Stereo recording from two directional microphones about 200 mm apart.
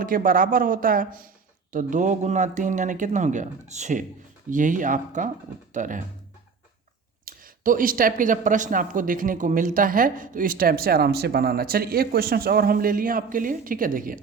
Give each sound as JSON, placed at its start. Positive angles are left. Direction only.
{"t": 0.0, "sound": "speech", "side_deg": -45}
{"t": 7.3, "sound": "speech", "side_deg": -45}